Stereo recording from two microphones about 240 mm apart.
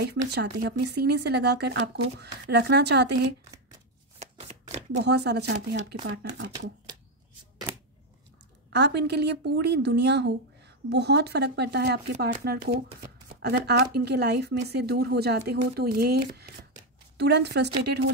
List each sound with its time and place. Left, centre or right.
0.3 s speech: right
4.2 s shuffling cards: right
4.9 s speech: right
8.6 s speech: right
13.4 s speech: right